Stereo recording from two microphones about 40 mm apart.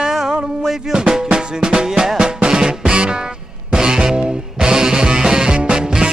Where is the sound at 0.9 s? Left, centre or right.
Centre.